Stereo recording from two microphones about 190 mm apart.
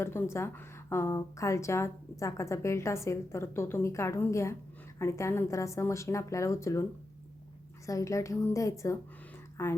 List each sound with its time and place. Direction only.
0.0 s a woman's voice: 10° left (ahead or behind)
7.9 s a woman's voice: 15° left (ahead or behind)